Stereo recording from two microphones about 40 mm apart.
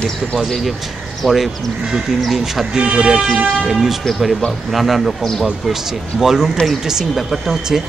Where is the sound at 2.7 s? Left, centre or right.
Right.